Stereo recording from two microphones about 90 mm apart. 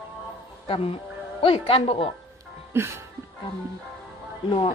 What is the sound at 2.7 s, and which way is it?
Speech, 30° right (ahead or behind).